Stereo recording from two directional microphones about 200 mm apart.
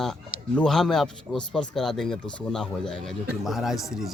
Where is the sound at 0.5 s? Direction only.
5° left (ahead or behind).